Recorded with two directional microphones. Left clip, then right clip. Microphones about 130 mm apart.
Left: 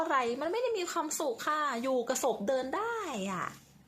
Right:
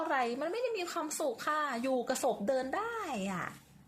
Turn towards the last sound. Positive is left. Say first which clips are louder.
# left 2 dB
turn(degrees=25)  # may be behind; listen again after turning